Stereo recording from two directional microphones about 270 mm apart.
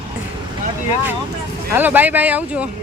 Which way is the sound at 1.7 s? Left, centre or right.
Centre.